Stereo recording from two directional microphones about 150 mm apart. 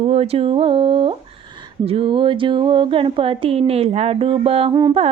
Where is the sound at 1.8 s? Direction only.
35° right (ahead or behind).